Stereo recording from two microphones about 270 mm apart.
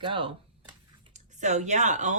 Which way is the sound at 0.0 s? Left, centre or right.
Centre.